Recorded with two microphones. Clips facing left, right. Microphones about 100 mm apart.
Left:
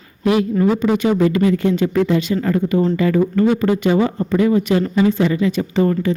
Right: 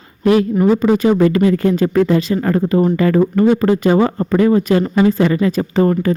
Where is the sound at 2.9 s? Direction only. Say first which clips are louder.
Right 2 dB; 50° right (ahead or behind).